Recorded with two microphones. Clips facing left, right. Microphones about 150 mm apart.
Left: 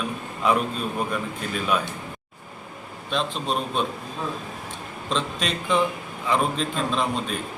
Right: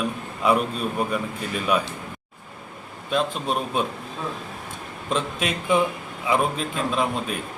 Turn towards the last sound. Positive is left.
turn(degrees=-5)  # may be behind; listen again after turning